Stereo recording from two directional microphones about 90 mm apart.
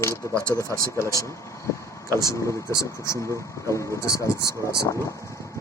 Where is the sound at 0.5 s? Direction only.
35° left (ahead or behind).